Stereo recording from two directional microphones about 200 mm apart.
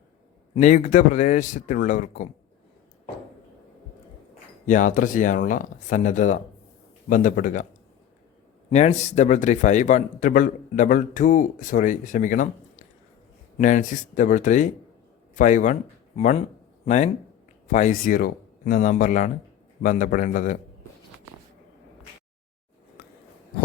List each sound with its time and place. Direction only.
0.5 s a man's voice: 40° left (ahead or behind)
4.6 s a man's voice: 40° left (ahead or behind)
8.7 s a man's voice: 35° left (ahead or behind)